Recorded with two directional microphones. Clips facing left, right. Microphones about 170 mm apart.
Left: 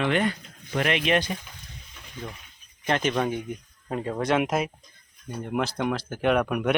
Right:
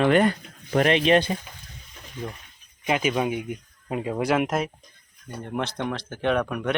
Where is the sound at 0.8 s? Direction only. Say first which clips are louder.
Right 4 dB; 35° right (ahead or behind).